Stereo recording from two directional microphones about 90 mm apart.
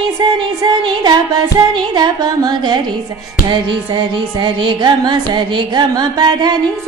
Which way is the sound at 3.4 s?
55° right (ahead or behind).